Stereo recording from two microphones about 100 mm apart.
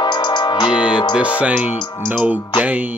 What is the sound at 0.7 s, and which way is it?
Music, 10° right (ahead or behind).